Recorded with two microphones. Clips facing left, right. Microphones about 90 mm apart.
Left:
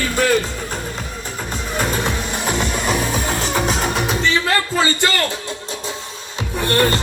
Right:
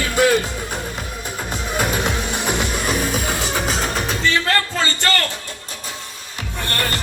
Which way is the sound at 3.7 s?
Centre (ahead or behind).